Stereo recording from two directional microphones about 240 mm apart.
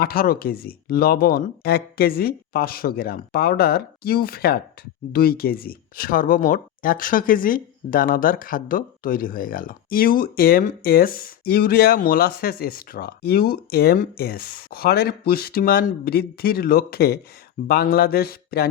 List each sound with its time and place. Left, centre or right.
0.0 s speech: left